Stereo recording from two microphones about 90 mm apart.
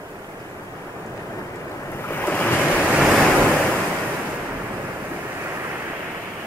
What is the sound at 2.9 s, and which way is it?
Waves, 5° right (ahead or behind).